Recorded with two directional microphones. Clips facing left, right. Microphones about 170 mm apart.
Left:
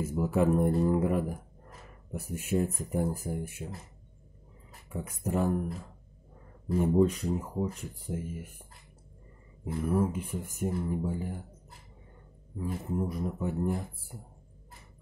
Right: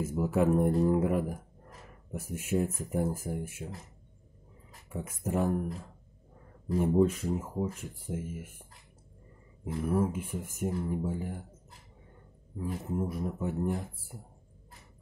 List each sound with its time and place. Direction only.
0.0 s speech: 5° right (ahead or behind)
4.8 s speech: 5° right (ahead or behind)
6.7 s speech: centre (ahead or behind)
9.8 s speech: 5° right (ahead or behind)
12.5 s speech: 5° right (ahead or behind)